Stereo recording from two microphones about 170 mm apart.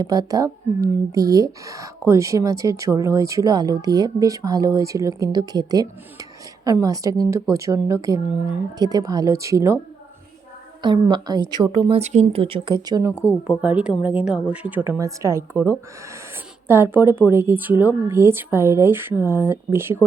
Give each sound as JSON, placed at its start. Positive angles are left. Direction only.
{"t": 0.0, "sound": "speech", "side_deg": -20}
{"t": 10.8, "sound": "speech", "side_deg": -25}
{"t": 12.8, "sound": "speech", "side_deg": -20}